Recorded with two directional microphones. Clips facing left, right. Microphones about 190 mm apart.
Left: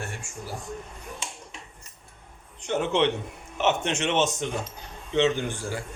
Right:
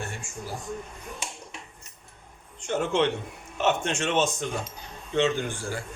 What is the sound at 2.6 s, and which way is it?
A man's voice, 20° left (ahead or behind).